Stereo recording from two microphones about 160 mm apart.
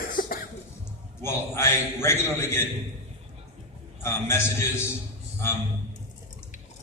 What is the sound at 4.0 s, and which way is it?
Speech, 15° left (ahead or behind).